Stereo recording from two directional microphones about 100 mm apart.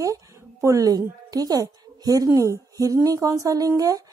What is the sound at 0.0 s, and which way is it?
A woman's voice, 35° right (ahead or behind).